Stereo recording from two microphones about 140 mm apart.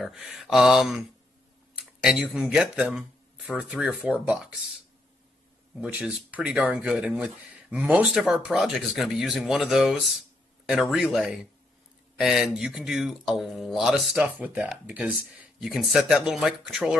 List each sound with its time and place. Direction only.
0.0 s speech: 5° right (ahead or behind)
5.8 s speech: 5° right (ahead or behind)